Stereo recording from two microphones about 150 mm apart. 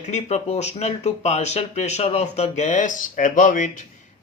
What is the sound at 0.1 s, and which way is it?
Speech, 50° left (ahead or behind).